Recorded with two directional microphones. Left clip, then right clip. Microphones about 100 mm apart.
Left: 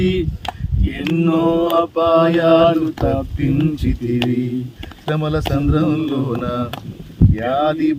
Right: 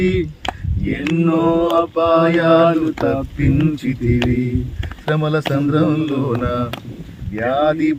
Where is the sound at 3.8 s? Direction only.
Centre (ahead or behind).